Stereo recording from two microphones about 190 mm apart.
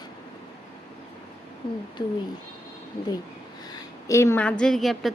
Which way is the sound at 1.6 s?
25° left (ahead or behind).